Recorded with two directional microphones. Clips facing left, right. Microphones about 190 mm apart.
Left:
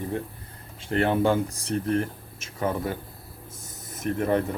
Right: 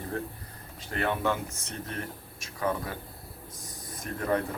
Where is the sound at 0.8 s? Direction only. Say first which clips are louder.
Left 7 dB; 30° left (ahead or behind).